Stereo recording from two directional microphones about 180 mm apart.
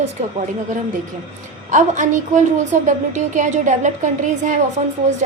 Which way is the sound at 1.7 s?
45° right (ahead or behind).